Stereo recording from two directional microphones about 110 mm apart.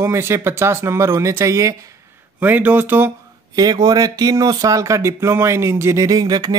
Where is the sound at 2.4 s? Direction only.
15° right (ahead or behind).